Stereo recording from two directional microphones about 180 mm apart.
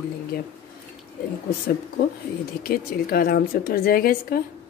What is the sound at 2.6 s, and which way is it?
A woman's voice, 55° left (ahead or behind).